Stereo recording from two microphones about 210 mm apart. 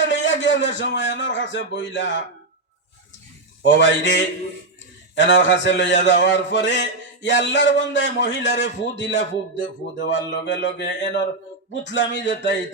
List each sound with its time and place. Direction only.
0.0 s a man's voice: 60° left (ahead or behind)
3.6 s speech: 60° left (ahead or behind)